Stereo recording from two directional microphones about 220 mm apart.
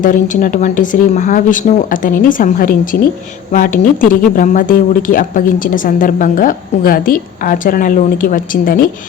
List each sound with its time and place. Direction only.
0.0 s speech: 35° left (ahead or behind)